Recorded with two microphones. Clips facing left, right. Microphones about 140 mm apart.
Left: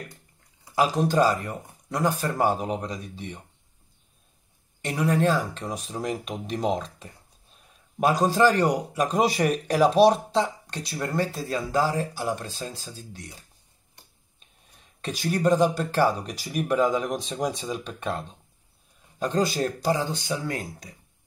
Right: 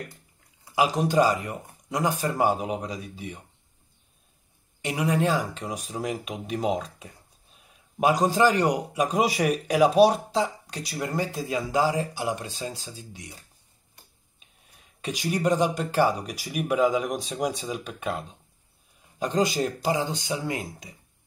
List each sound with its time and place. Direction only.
0.7 s speech: 10° right (ahead or behind)
4.8 s speech: 10° right (ahead or behind)
14.8 s speech: 10° right (ahead or behind)